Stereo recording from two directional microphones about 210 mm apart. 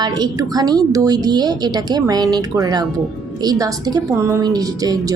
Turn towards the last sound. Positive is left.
turn(degrees=-15)  # may be behind; listen again after turning